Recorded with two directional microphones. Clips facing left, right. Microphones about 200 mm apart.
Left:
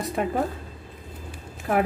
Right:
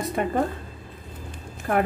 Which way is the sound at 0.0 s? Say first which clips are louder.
Right 1 dB; centre (ahead or behind).